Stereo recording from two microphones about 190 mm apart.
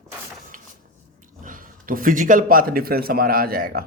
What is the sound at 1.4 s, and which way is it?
A man's voice, 45° right (ahead or behind).